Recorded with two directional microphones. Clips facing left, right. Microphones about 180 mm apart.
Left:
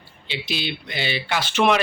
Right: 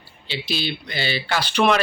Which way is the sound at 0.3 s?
20° left (ahead or behind).